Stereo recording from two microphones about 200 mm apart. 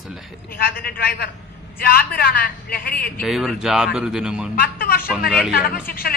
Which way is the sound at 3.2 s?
Centre (ahead or behind).